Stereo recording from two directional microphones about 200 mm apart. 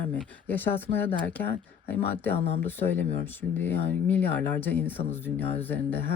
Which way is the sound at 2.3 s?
30° left (ahead or behind).